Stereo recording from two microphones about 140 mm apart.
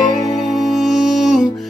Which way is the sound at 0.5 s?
Centre (ahead or behind).